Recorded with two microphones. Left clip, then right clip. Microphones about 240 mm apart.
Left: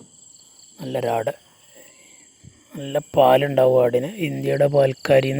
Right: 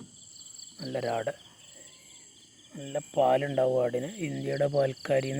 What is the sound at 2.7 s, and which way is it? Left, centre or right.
Speech, left.